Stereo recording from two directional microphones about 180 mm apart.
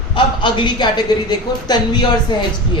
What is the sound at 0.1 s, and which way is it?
A man's voice, 25° left (ahead or behind).